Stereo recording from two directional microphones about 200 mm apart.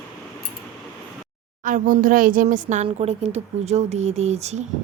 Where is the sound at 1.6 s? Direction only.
40° right (ahead or behind).